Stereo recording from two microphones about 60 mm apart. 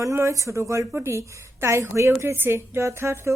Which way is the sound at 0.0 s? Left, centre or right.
Right.